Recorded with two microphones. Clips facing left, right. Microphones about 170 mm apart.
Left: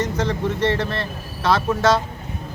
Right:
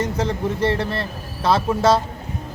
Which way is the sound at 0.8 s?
Centre (ahead or behind).